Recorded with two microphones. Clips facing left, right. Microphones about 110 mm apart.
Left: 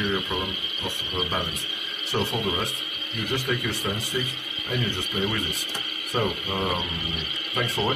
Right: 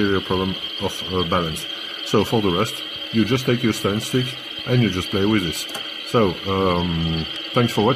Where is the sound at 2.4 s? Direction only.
50° right (ahead or behind).